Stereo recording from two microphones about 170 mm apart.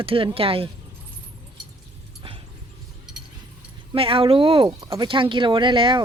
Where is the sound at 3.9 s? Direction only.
30° right (ahead or behind).